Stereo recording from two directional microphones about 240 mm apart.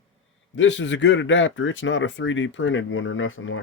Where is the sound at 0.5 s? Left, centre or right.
Left.